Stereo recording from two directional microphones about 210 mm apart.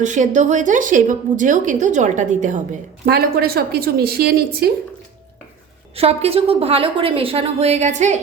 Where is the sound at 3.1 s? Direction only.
50° right (ahead or behind).